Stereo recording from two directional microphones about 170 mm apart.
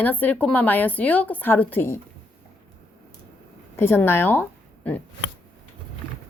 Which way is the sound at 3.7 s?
15° left (ahead or behind).